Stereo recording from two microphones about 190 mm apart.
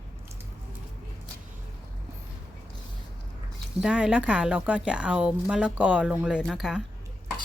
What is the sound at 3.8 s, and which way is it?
Speech, 5° right (ahead or behind).